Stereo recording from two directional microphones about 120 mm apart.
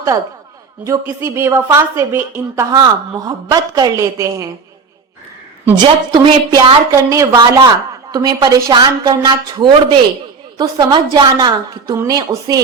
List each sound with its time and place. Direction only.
0.9 s a woman's voice: 20° right (ahead or behind)
2.7 s a woman's voice: 35° right (ahead or behind)
5.7 s a woman's voice: 40° right (ahead or behind)